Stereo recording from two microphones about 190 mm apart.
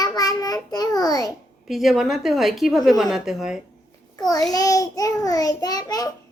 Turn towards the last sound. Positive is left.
turn(degrees=20)  # may be behind; listen again after turning